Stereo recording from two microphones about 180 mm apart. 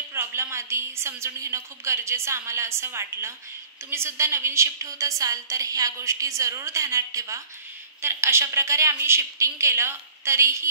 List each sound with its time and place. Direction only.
0.1 s a woman's voice: 15° right (ahead or behind)